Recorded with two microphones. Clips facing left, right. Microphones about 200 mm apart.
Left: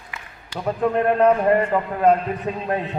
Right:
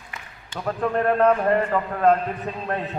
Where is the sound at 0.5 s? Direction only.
10° left (ahead or behind).